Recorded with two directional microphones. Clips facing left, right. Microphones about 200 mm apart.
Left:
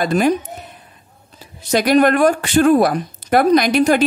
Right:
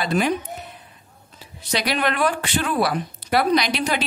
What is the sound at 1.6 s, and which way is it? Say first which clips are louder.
Speech: left 10 dB; 50° left (ahead or behind).